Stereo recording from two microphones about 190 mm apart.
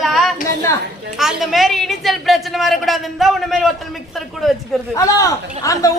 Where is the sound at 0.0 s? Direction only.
Centre (ahead or behind).